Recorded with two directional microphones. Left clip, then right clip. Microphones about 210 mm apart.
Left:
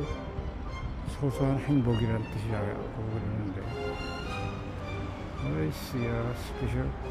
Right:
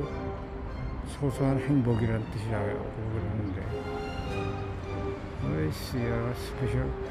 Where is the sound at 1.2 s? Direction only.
5° right (ahead or behind).